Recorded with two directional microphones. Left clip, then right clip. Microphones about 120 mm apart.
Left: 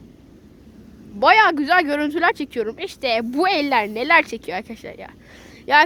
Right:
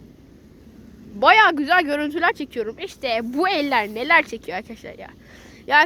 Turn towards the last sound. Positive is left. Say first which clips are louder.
# left 1 dB
turn(degrees=30)  # may be behind; listen again after turning